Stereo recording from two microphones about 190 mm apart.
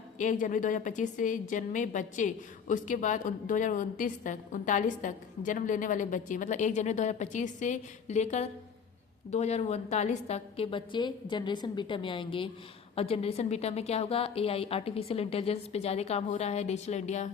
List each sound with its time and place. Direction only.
0.2 s a woman's voice: 40° left (ahead or behind)